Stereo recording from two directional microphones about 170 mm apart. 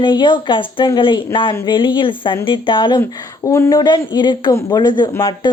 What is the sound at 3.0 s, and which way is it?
Speech, 15° left (ahead or behind).